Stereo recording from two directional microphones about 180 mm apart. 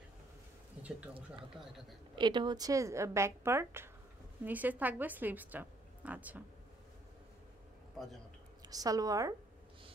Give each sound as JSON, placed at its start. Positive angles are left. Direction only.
{"t": 2.1, "sound": "a woman's voice", "side_deg": -25}
{"t": 8.6, "sound": "a woman's voice", "side_deg": -20}